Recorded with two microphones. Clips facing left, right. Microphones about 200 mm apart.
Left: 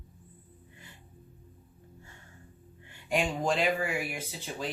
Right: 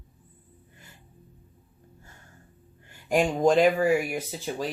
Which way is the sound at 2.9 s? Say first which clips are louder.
Right 6 dB; 45° right (ahead or behind).